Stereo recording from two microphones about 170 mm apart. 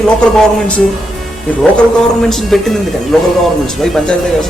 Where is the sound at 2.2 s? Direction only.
Centre (ahead or behind).